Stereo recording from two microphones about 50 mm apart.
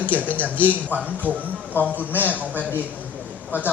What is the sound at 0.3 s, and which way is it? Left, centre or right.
Speech, left.